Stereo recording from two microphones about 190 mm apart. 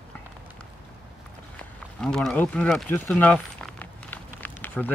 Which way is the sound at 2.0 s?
5° left (ahead or behind).